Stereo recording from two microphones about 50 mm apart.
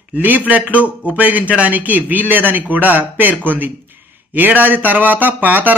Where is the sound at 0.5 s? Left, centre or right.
Right.